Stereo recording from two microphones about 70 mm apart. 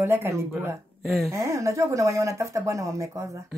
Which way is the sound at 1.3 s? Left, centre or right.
Right.